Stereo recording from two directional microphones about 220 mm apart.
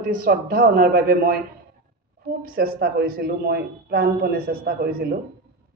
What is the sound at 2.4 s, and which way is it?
Speech, 45° right (ahead or behind).